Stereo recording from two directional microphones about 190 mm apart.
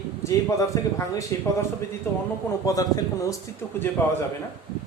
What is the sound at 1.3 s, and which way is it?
Speech, 15° left (ahead or behind).